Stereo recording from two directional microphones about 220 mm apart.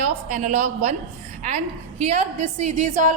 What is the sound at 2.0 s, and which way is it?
A woman's voice, 30° right (ahead or behind).